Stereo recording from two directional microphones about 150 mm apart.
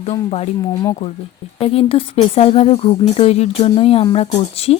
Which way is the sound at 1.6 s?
40° left (ahead or behind).